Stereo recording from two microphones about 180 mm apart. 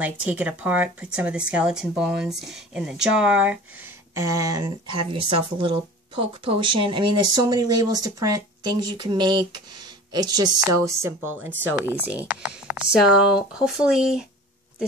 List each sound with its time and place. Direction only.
0.0 s speech: 10° right (ahead or behind)
4.1 s speech: 15° right (ahead or behind)